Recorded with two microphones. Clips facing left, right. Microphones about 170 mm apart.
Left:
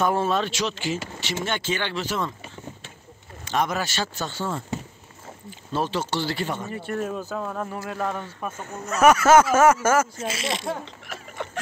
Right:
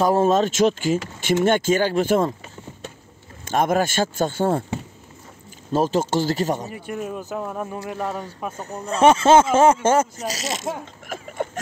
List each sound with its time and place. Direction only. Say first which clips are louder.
0.0 s speech: right 5 dB; 40° right (ahead or behind)
3.4 s speech: right 6 dB; 50° right (ahead or behind)
5.7 s speech: right 6 dB; 45° right (ahead or behind)
6.7 s speech: left 1 dB; 10° right (ahead or behind)
8.5 s speech: right 3 dB; 35° right (ahead or behind)
11.1 s a sound: right 10 dB; 45° right (ahead or behind)